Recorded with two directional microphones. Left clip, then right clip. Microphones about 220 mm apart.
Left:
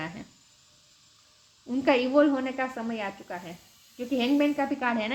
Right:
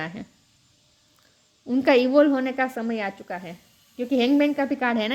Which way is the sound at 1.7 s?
45° right (ahead or behind).